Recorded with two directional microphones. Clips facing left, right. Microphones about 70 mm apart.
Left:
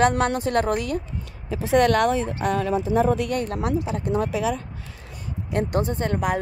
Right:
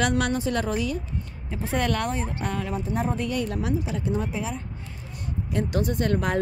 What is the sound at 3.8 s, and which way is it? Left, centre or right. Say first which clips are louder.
Speech: left 2 dB; left.